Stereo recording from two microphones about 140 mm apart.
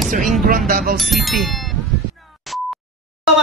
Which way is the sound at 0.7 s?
85° right.